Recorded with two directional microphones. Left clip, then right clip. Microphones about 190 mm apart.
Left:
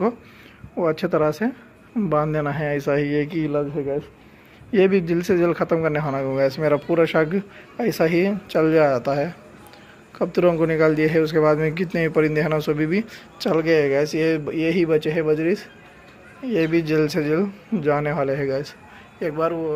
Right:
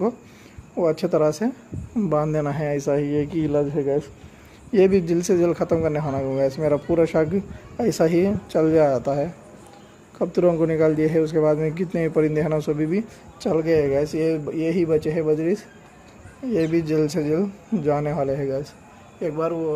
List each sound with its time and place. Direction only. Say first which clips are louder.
0.7 s speech: even; 5° right (ahead or behind)
3.3 s speech: right 1 dB; 20° right (ahead or behind)
4.7 s speech: even; 5° right (ahead or behind)